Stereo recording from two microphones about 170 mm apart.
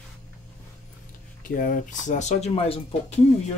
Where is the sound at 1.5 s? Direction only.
55° left (ahead or behind); by 3.2 s 35° left (ahead or behind).